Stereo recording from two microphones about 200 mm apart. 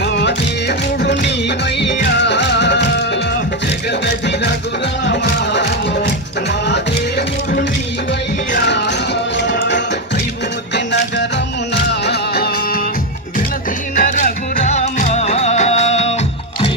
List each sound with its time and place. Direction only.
2.0 s music: 60° left (ahead or behind)
5.0 s music: 60° left (ahead or behind)
8.5 s music: 60° left (ahead or behind)
11.9 s music: 55° left (ahead or behind)
13.9 s music: 40° left (ahead or behind)